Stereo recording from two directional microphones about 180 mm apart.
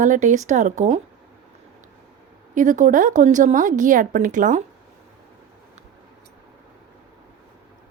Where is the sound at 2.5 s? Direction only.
45° right (ahead or behind).